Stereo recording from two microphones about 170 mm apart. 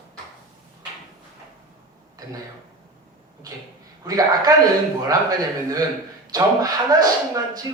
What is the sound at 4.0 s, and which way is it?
Speech, 20° right (ahead or behind).